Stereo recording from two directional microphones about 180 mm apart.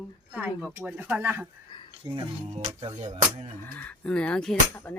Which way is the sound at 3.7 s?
5° left (ahead or behind).